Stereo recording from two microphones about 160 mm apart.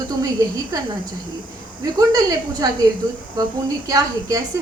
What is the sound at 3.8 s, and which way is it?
Speech, 20° right (ahead or behind).